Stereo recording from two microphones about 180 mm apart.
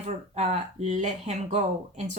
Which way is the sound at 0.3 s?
40° right (ahead or behind).